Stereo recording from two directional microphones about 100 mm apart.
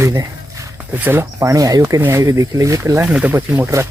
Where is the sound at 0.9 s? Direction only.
20° right (ahead or behind).